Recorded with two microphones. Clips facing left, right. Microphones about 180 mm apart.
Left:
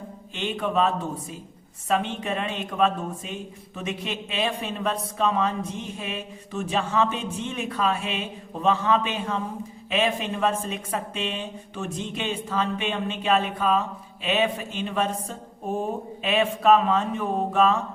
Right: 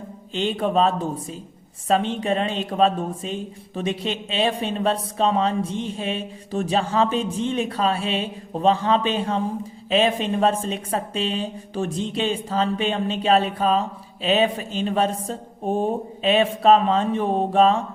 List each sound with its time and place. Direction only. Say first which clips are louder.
0.3 s speech: right 4 dB; 35° right (ahead or behind)